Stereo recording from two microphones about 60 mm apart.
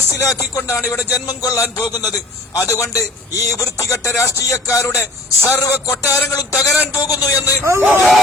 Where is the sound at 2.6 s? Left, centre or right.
Left.